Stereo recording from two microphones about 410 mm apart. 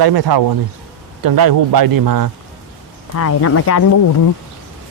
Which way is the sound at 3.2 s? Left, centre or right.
Left.